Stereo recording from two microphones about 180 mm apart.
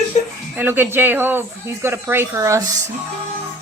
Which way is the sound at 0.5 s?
10° right (ahead or behind).